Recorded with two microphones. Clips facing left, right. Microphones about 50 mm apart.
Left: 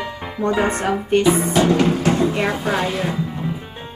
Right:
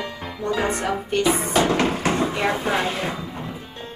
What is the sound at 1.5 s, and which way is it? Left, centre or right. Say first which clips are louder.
Music: left 3 dB; centre.